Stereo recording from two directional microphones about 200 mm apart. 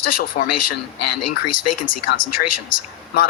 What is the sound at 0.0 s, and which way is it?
Speech, 45° left (ahead or behind).